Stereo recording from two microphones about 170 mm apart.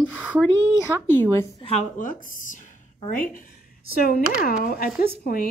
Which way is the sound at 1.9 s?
50° left (ahead or behind).